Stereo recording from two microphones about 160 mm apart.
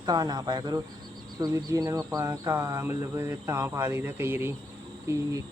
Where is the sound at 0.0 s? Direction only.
25° right (ahead or behind).